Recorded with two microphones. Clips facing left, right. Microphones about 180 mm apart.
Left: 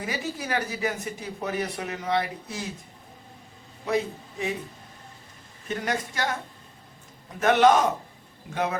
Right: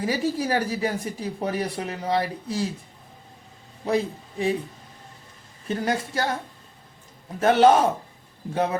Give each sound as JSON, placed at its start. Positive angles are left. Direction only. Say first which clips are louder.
{"t": 0.0, "sound": "speech", "louder": "right 7 dB", "side_deg": -35}
{"t": 3.8, "sound": "speech", "louder": "right 2 dB", "side_deg": -35}
{"t": 5.6, "sound": "speech", "louder": "right 3 dB", "side_deg": -30}
{"t": 7.3, "sound": "speech", "louder": "right 2 dB", "side_deg": -30}